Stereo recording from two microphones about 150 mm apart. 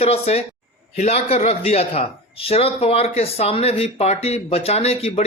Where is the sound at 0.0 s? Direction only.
45° left (ahead or behind).